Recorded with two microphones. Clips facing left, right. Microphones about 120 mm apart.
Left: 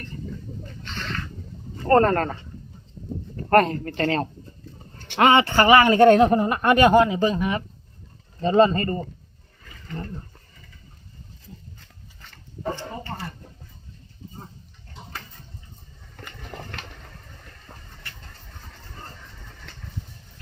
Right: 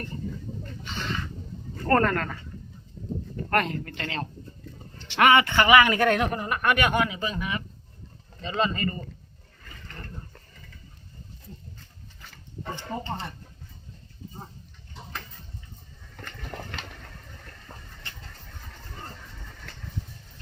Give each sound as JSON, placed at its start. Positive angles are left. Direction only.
{"t": 0.8, "sound": "a sound", "side_deg": -5}
{"t": 1.9, "sound": "speech", "side_deg": 30}
{"t": 3.5, "sound": "speech", "side_deg": 40}
{"t": 4.9, "sound": "a sound", "side_deg": 50}
{"t": 5.2, "sound": "speech", "side_deg": 30}
{"t": 12.7, "sound": "speech", "side_deg": -20}
{"t": 16.1, "sound": "a sound", "side_deg": 0}
{"t": 17.7, "sound": "vehicle", "side_deg": 10}
{"t": 18.0, "sound": "vehicle", "side_deg": -25}
{"t": 19.0, "sound": "vehicle", "side_deg": 0}